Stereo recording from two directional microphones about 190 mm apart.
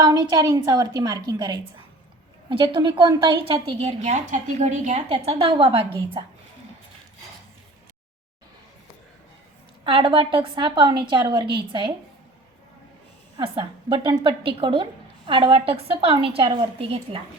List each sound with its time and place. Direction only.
0.0 s a woman's voice: 20° right (ahead or behind)
9.8 s a woman's voice: 25° right (ahead or behind)
13.3 s a woman's voice: 25° right (ahead or behind)